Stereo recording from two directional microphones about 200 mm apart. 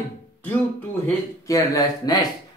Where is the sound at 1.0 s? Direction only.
15° left (ahead or behind).